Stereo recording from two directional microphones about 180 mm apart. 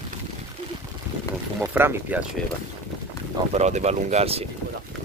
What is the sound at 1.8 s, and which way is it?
Speech, 15° right (ahead or behind).